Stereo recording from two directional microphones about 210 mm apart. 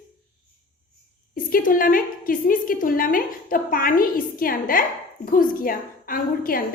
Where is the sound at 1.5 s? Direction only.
40° left (ahead or behind).